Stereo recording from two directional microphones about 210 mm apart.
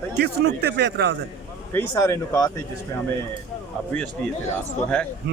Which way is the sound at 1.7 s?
15° left (ahead or behind).